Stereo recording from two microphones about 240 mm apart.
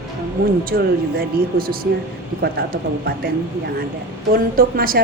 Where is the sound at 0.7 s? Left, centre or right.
Right.